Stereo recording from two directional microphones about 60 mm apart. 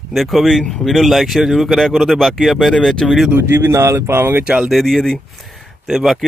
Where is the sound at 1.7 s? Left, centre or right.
Centre.